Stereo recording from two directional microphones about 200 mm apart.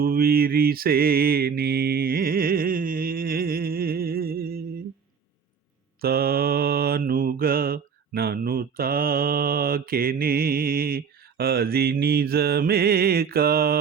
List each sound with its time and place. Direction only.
0.0 s mantra: 50° right (ahead or behind)
6.0 s mantra: 50° right (ahead or behind)